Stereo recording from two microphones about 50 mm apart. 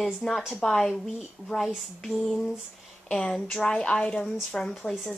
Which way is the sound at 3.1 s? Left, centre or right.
Centre.